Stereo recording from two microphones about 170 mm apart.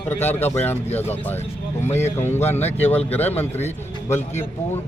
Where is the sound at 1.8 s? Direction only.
40° left (ahead or behind).